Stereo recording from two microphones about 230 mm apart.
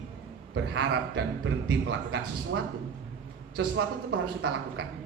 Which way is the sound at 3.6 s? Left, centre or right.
Right.